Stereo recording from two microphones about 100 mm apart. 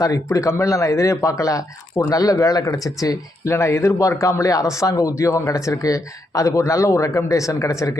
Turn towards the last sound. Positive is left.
turn(degrees=30)  # may be behind; listen again after turning